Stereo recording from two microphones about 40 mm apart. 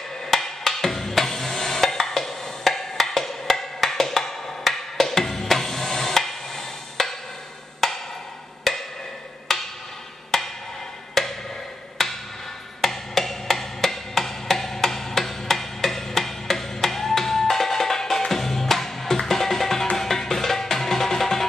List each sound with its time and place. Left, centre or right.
0.3 s music: centre
7.8 s wood block: centre
10.3 s music: centre
12.8 s percussion: centre
18.3 s music: centre